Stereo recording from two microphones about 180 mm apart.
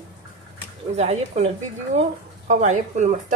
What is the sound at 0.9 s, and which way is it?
Speech, 35° right (ahead or behind).